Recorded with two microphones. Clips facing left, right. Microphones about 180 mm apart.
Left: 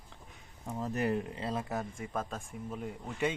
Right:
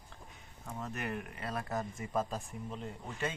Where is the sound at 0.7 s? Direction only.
35° left (ahead or behind).